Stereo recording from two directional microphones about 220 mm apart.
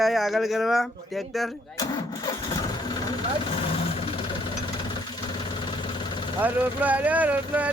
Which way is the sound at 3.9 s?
25° left (ahead or behind).